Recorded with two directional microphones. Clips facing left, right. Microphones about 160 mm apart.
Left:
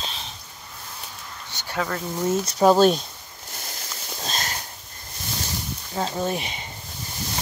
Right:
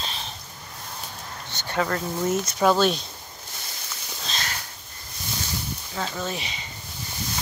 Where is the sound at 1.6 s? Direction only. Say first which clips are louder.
Right 2 dB; 5° left (ahead or behind).